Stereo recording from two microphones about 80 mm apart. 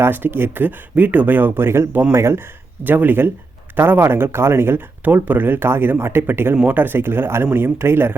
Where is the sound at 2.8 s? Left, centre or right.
Right.